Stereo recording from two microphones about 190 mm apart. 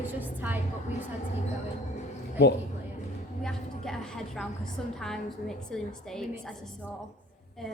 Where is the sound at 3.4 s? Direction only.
5° left (ahead or behind).